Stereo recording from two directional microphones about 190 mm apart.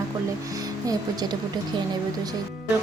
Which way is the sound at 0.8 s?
20° right (ahead or behind).